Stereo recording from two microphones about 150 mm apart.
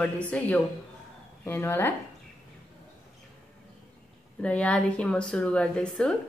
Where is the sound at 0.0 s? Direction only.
10° left (ahead or behind).